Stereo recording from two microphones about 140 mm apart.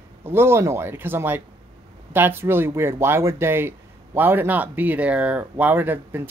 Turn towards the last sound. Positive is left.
turn(degrees=-15)  # may be behind; listen again after turning